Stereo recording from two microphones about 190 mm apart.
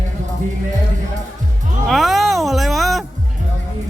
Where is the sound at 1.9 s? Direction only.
Centre (ahead or behind).